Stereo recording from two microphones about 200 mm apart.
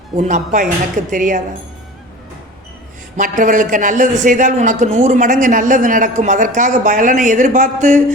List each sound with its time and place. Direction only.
0.2 s a man's voice: 40° right (ahead or behind)
3.2 s a man's voice: 40° right (ahead or behind)